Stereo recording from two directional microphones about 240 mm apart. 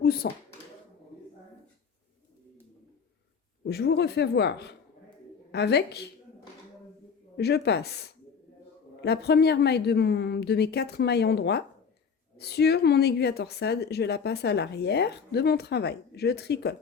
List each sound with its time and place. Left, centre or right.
0.0 s speech: left
3.6 s a woman's voice: left
7.3 s a woman's voice: left